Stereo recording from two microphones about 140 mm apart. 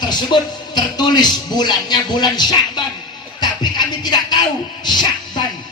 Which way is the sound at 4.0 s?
30° left (ahead or behind).